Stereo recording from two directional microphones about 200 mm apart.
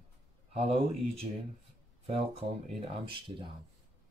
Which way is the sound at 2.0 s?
30° right (ahead or behind).